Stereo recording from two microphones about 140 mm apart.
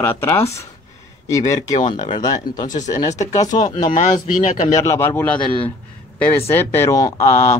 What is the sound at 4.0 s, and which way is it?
Speech, 60° left (ahead or behind).